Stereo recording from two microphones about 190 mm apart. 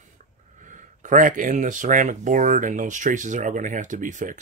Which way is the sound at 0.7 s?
40° right (ahead or behind).